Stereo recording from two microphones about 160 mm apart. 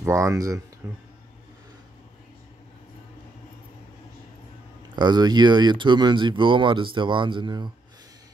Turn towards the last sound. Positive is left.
turn(degrees=-30)  # may be behind; listen again after turning